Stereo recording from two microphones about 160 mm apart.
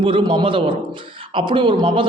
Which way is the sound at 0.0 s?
30° right (ahead or behind).